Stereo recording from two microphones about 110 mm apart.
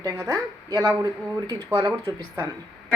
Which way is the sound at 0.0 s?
30° right (ahead or behind).